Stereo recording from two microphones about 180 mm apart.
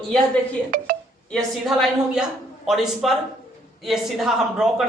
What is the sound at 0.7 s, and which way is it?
Speech, 50° right (ahead or behind).